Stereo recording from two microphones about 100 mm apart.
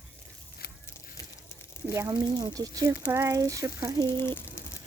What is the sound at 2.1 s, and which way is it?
Speech, 40° right (ahead or behind).